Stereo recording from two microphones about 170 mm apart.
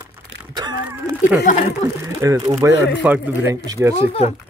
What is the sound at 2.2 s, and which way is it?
Speech, 20° right (ahead or behind).